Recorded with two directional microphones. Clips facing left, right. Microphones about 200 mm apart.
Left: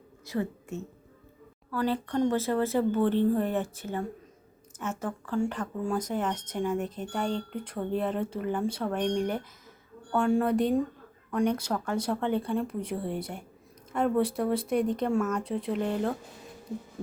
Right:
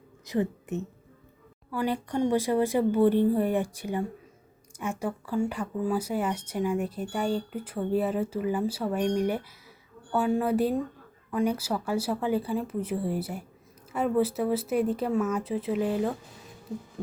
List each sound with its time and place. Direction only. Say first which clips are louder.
0.3 s a woman's voice: right 4 dB; 20° right (ahead or behind)